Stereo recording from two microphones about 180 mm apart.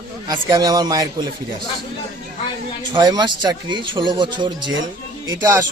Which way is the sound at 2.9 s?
25° right (ahead or behind).